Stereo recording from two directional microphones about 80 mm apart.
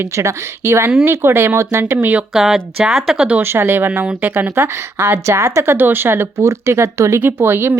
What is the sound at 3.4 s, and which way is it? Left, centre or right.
Speech, right.